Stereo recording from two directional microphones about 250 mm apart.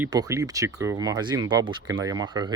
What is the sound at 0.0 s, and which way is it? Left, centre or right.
Speech, centre.